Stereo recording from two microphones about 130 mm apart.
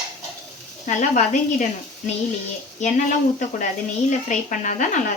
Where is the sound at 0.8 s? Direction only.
70° left (ahead or behind).